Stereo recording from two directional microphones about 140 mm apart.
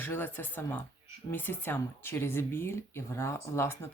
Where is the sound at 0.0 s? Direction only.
15° left (ahead or behind).